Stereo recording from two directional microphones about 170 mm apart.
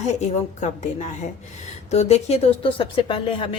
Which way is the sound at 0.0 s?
40° left (ahead or behind).